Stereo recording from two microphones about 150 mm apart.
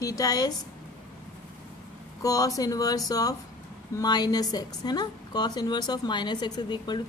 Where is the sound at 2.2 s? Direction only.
25° left (ahead or behind).